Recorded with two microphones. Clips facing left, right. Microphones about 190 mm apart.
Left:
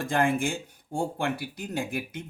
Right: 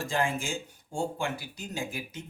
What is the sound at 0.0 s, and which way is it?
Speech, 55° left (ahead or behind).